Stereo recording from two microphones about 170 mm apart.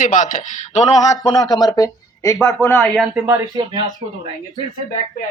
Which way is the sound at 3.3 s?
20° right (ahead or behind).